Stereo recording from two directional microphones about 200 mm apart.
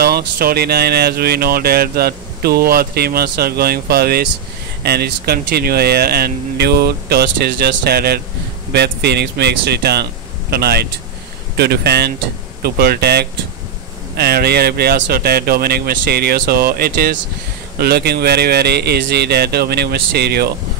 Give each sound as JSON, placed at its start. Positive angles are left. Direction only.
{"t": 0.0, "sound": "speech", "side_deg": -50}